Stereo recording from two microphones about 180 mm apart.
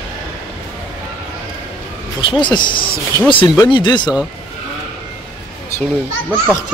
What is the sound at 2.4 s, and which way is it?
Speech, 25° left (ahead or behind).